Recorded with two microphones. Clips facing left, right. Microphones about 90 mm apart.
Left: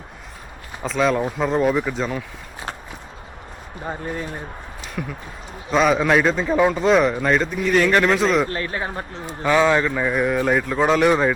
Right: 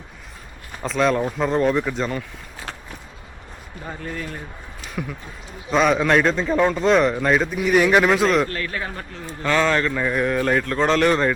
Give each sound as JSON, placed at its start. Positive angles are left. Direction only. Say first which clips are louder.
{"t": 0.8, "sound": "a man's voice", "louder": "even", "side_deg": 0}
{"t": 3.8, "sound": "speech", "louder": "left 3 dB", "side_deg": 25}
{"t": 5.0, "sound": "a man's voice", "louder": "even", "side_deg": 0}
{"t": 8.4, "sound": "speech", "louder": "left 2 dB", "side_deg": 25}
{"t": 9.4, "sound": "speech", "louder": "left 3 dB", "side_deg": 10}